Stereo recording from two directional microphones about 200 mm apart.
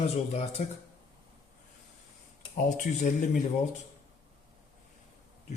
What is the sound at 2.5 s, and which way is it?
Speech, 40° left (ahead or behind).